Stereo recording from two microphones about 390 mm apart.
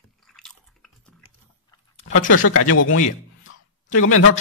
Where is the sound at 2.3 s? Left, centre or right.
Left.